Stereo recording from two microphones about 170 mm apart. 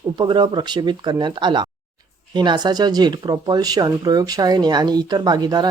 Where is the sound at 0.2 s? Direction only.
25° right (ahead or behind).